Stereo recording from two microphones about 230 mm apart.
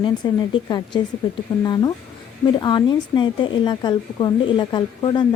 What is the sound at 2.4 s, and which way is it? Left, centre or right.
Speech, centre.